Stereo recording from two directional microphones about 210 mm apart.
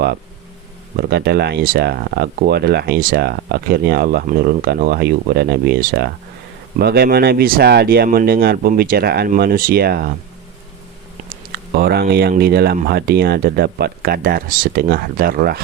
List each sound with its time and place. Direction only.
0.9 s speech: 50° right (ahead or behind)
11.7 s speech: 45° right (ahead or behind)